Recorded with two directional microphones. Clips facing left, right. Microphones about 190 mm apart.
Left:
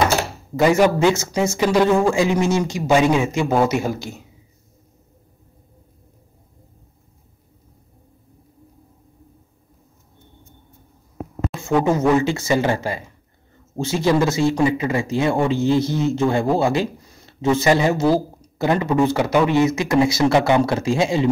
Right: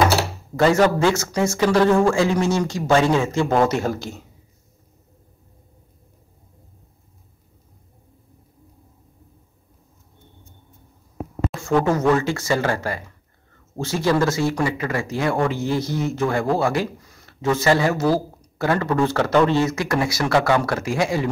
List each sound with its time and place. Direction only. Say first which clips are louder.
0.6 s speech: left 1 dB; 10° left (ahead or behind)
0.9 s speech: left 2 dB; 20° left (ahead or behind)
11.7 s speech: left 1 dB; 10° left (ahead or behind)